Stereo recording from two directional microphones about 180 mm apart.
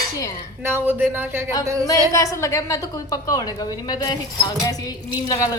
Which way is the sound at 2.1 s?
15° left (ahead or behind).